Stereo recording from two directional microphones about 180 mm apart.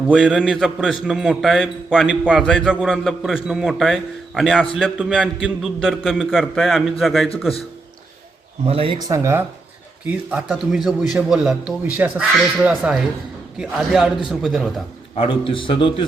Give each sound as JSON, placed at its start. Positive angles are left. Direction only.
{"t": 0.1, "sound": "a man's voice", "side_deg": -5}
{"t": 8.6, "sound": "speech", "side_deg": -30}
{"t": 10.1, "sound": "a man's voice", "side_deg": -5}
{"t": 15.1, "sound": "a man's voice", "side_deg": 30}